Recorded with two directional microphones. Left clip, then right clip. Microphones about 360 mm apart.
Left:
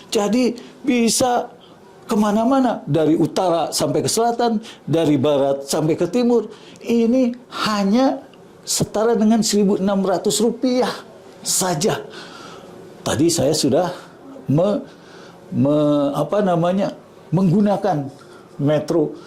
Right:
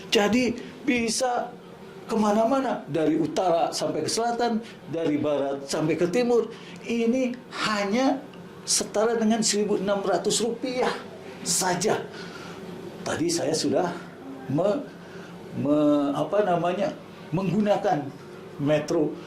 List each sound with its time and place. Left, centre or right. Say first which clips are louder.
0.1 s speech: left 2 dB; centre
0.4 s a man's voice: left 6 dB; left
1.0 s a woman's voice: left 11 dB; left
2.0 s speech: left 4 dB; left
4.9 s a woman's voice: left 9 dB; left
5.9 s speech: left 4 dB; left
6.8 s a woman's voice: left 8 dB; left
10.6 s speech: left 7 dB; left
15.7 s speech: left 4 dB; left
17.3 s a woman's voice: left 5 dB; left